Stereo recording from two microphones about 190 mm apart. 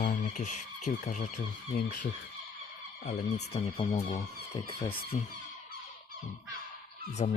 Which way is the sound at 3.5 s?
35° left (ahead or behind).